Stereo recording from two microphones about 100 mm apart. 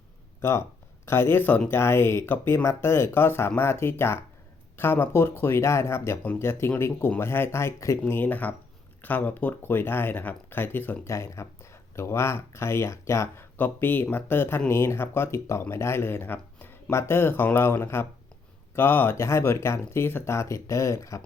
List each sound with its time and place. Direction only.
0.4 s speech: 25° left (ahead or behind)